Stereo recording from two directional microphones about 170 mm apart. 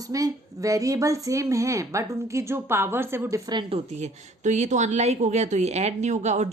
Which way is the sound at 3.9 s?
40° right (ahead or behind).